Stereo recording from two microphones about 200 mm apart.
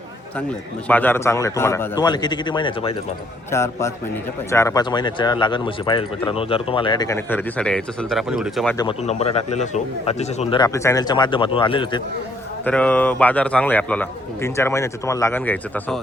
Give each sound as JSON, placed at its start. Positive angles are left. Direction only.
{"t": 0.9, "sound": "a man's voice", "side_deg": 10}
{"t": 7.3, "sound": "speech", "side_deg": 10}
{"t": 9.0, "sound": "a man's voice", "side_deg": 30}
{"t": 10.5, "sound": "speech", "side_deg": 15}
{"t": 12.6, "sound": "a man's voice", "side_deg": 5}